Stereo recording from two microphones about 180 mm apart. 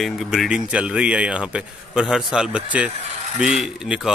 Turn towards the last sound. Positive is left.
turn(degrees=0)  # may be behind; listen again after turning